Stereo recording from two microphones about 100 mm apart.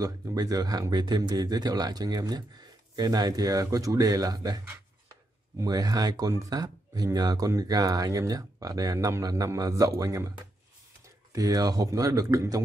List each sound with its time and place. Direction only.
0.0 s speech: 35° right (ahead or behind)
5.6 s speech: 40° right (ahead or behind)
11.3 s speech: 40° right (ahead or behind)